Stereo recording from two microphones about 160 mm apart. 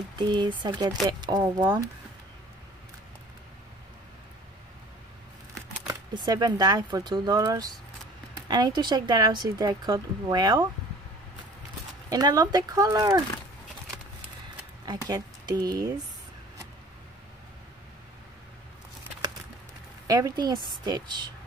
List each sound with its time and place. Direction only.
0.2 s speech: 30° right (ahead or behind)
5.9 s speech: 25° right (ahead or behind)
12.1 s speech: 25° right (ahead or behind)
14.9 s speech: 25° right (ahead or behind)
20.1 s speech: 25° right (ahead or behind)